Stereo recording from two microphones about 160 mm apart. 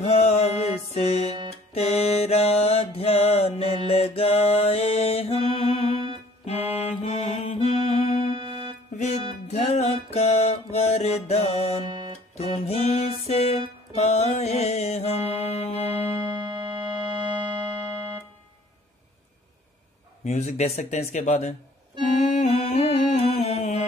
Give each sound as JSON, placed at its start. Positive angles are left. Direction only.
{"t": 0.0, "sound": "music", "side_deg": 45}
{"t": 1.7, "sound": "mantra", "side_deg": 40}
{"t": 6.4, "sound": "music", "side_deg": 40}
{"t": 8.3, "sound": "music", "side_deg": -35}
{"t": 8.9, "sound": "music", "side_deg": 45}
{"t": 16.1, "sound": "music", "side_deg": -25}
{"t": 20.2, "sound": "speech", "side_deg": 45}
{"t": 22.3, "sound": "music", "side_deg": 40}